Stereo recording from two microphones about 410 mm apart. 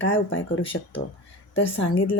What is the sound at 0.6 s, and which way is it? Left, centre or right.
Speech, centre.